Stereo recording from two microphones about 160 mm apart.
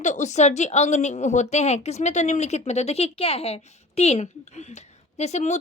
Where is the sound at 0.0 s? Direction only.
50° left (ahead or behind).